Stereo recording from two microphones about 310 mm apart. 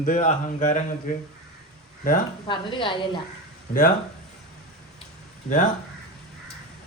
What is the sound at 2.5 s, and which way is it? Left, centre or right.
Speech, centre.